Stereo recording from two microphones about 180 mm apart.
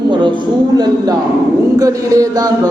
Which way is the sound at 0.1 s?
25° right (ahead or behind).